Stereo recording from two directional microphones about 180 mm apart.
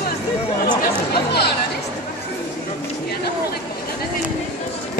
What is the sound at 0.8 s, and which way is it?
Chatter, 60° left (ahead or behind).